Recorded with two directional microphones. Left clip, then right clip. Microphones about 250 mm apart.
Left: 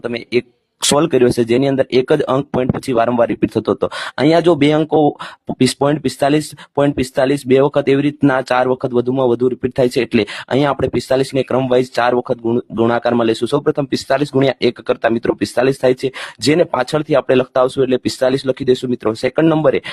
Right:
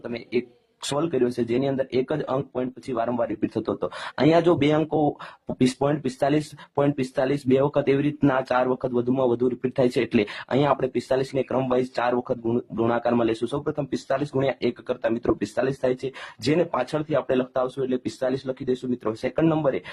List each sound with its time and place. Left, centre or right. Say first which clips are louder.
0.0 s speech: left 9 dB; left